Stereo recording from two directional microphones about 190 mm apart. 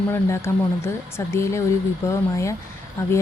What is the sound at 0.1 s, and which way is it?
A woman's voice, 15° left (ahead or behind).